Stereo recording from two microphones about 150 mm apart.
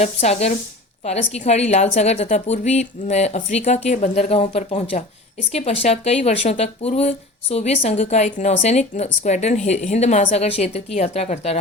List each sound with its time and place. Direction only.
0.0 s a woman's voice: 45° left (ahead or behind)